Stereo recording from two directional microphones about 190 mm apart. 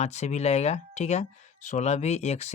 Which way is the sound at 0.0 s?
35° left (ahead or behind).